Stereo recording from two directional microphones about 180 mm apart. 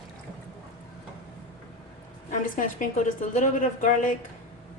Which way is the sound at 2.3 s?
45° left (ahead or behind).